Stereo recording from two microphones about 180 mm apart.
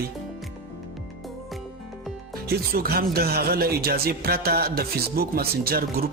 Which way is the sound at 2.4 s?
60° right (ahead or behind).